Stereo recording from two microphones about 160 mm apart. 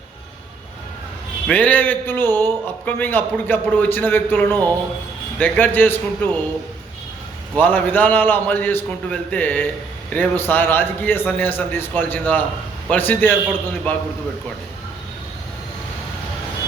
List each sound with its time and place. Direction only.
1.5 s a man's voice: 10° left (ahead or behind)
7.5 s a man's voice: 10° left (ahead or behind)